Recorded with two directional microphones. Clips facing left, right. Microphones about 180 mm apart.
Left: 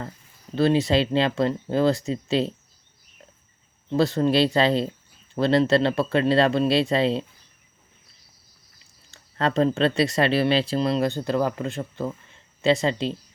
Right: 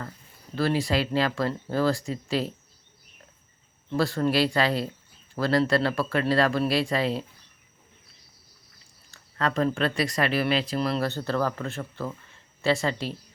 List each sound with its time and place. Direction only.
0.5 s speech: 25° left (ahead or behind)
3.8 s speech: 20° left (ahead or behind)
9.0 s speech: 25° left (ahead or behind)